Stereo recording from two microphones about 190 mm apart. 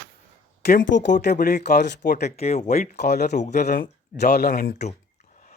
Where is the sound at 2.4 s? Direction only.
35° left (ahead or behind).